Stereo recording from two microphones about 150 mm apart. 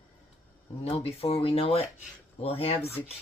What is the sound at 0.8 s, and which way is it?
Speech, 45° left (ahead or behind).